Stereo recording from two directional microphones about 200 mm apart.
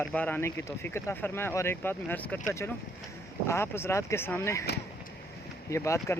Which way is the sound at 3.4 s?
10° left (ahead or behind).